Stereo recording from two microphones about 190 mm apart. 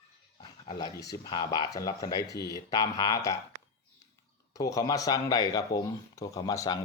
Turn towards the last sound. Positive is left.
turn(degrees=20)  # may be behind; listen again after turning